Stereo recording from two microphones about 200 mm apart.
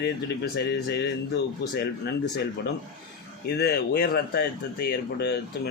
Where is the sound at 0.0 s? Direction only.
55° left (ahead or behind).